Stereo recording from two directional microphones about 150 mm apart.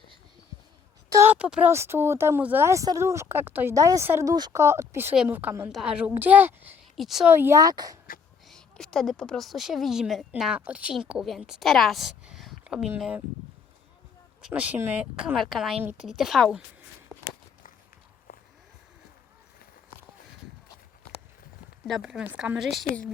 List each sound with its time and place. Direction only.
1.1 s speech: 15° right (ahead or behind)
6.9 s speech: centre (ahead or behind)
7.3 s speech: 15° right (ahead or behind)
8.4 s speech: 5° left (ahead or behind)
14.4 s speech: 10° right (ahead or behind)
15.8 s speech: 10° right (ahead or behind)
16.0 s speech: centre (ahead or behind)
21.8 s speech: centre (ahead or behind)